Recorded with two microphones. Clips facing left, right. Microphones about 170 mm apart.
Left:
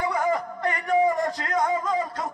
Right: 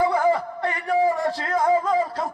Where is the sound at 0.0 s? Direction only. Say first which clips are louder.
Right 5 dB; 30° right (ahead or behind).